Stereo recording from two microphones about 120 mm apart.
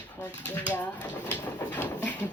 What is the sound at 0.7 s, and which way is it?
Pigeon, 15° left (ahead or behind).